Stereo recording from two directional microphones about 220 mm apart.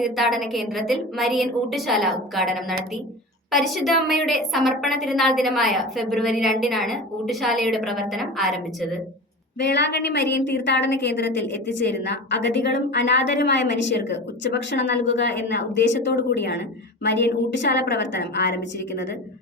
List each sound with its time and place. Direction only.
0.0 s a woman's voice: centre (ahead or behind)
9.6 s a woman's voice: 50° left (ahead or behind)